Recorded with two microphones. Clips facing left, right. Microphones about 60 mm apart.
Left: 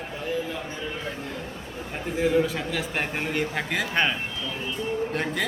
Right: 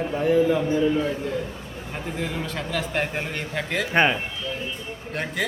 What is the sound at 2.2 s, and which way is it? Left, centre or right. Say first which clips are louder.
A man's voice: left 9 dB; centre.